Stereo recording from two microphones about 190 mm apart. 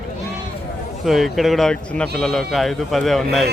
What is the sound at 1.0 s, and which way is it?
Speech, centre (ahead or behind).